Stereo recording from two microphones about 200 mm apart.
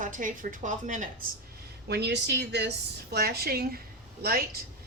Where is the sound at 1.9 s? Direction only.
55° right (ahead or behind).